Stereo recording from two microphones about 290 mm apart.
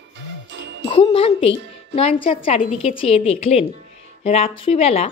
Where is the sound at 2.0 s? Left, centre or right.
Centre.